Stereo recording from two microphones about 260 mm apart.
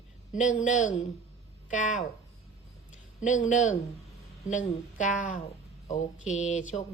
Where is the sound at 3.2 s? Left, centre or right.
Left.